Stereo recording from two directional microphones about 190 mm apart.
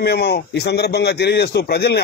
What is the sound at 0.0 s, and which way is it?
Speech, 60° left (ahead or behind).